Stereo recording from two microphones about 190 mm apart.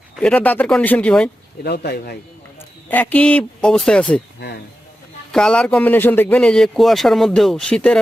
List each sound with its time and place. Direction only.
0.2 s speech: 5° left (ahead or behind)
1.6 s speech: 60° left (ahead or behind)
2.9 s speech: 10° left (ahead or behind)
5.3 s a man's voice: 5° left (ahead or behind)